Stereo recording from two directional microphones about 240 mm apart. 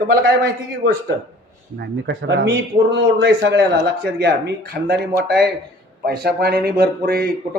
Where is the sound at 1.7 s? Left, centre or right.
Right.